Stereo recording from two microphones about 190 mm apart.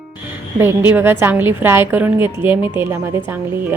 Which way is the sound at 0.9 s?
10° right (ahead or behind).